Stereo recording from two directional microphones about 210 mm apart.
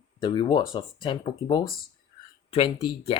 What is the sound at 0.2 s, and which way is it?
Speech, 25° left (ahead or behind).